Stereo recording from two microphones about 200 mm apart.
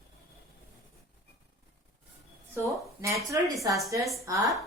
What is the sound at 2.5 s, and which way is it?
A woman's voice, 10° right (ahead or behind).